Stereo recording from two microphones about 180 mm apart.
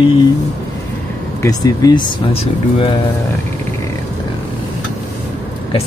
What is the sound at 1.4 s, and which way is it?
Speech, 20° left (ahead or behind).